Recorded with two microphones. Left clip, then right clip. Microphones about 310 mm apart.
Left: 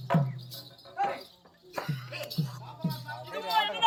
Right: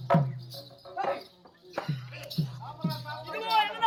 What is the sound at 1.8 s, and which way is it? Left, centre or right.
Music, centre.